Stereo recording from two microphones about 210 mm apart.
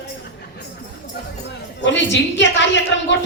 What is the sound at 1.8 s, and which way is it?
Speech, 60° left (ahead or behind).